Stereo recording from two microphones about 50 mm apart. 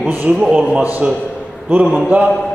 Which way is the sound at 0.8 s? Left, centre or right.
Right.